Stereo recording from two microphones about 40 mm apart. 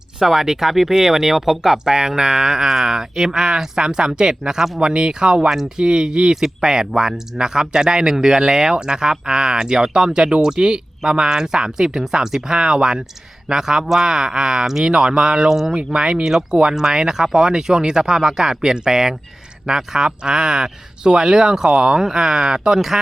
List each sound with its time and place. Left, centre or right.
0.2 s speech: centre
15.7 s speech: right